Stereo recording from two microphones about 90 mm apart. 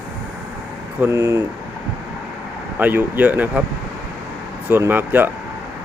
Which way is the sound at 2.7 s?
20° right (ahead or behind).